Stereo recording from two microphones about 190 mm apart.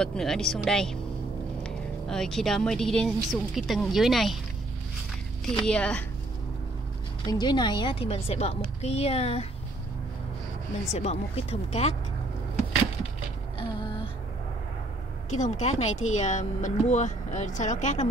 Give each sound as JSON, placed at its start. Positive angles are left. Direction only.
{"t": 0.0, "sound": "speech", "side_deg": 5}
{"t": 5.6, "sound": "speech", "side_deg": 5}
{"t": 7.2, "sound": "a woman's voice", "side_deg": 20}
{"t": 10.9, "sound": "a woman's voice", "side_deg": 35}
{"t": 13.6, "sound": "a sound", "side_deg": 25}
{"t": 15.3, "sound": "a woman's voice", "side_deg": 40}